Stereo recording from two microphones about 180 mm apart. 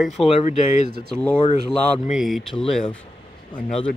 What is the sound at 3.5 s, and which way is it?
Speech, 25° left (ahead or behind).